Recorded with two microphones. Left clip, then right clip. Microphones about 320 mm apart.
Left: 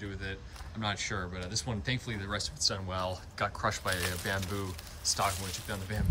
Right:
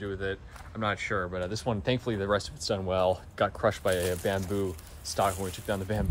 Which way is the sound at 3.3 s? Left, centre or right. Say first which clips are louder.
Right 5 dB; centre.